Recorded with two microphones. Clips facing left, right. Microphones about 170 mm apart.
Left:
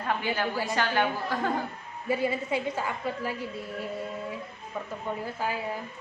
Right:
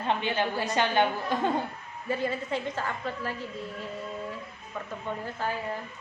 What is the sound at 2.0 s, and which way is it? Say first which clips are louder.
A woman's voice: left 2 dB; 10° left (ahead or behind).